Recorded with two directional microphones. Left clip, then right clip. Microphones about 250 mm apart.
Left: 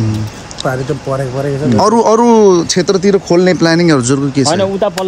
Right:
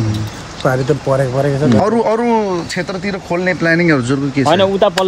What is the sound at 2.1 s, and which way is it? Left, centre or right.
Speech, centre.